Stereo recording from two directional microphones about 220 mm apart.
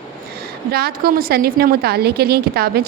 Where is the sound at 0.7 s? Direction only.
45° right (ahead or behind).